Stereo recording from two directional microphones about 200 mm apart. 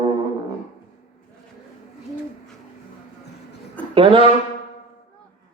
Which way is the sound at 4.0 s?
25° right (ahead or behind).